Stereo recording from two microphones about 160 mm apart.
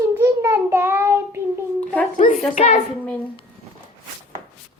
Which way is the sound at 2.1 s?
50° left (ahead or behind).